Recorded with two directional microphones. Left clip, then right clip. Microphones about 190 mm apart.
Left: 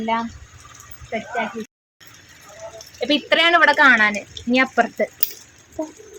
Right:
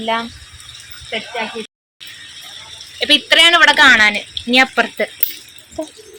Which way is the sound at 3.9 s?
30° right (ahead or behind).